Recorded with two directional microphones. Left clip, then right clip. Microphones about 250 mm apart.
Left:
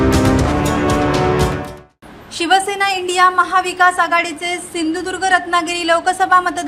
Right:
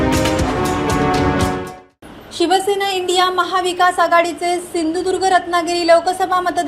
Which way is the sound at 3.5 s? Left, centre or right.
Centre.